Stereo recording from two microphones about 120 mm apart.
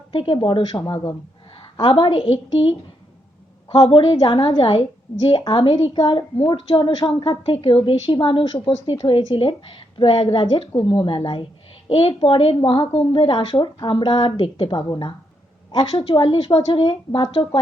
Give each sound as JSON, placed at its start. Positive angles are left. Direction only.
{"t": 0.1, "sound": "a woman's voice", "side_deg": 45}
{"t": 0.9, "sound": "a woman's voice", "side_deg": 30}
{"t": 1.8, "sound": "a woman's voice", "side_deg": 45}
{"t": 5.9, "sound": "a woman's voice", "side_deg": 40}
{"t": 11.9, "sound": "a woman's voice", "side_deg": 55}
{"t": 16.0, "sound": "a woman's voice", "side_deg": 50}